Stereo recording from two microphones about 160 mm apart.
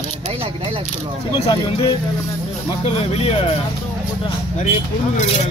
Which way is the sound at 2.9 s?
35° left (ahead or behind).